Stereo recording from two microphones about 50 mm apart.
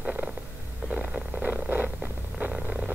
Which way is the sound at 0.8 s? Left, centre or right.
Right.